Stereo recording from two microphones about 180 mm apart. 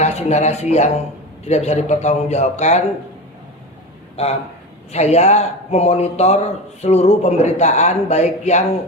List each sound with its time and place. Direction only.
0.0 s speech: 35° left (ahead or behind)
4.2 s speech: 35° left (ahead or behind)